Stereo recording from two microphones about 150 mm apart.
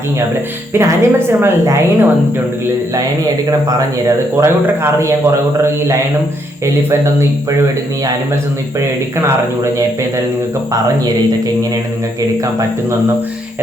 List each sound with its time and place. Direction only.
0.7 s a woman's voice: 20° right (ahead or behind)
3.7 s a man's voice: 20° right (ahead or behind)
6.9 s a woman's voice: 15° right (ahead or behind)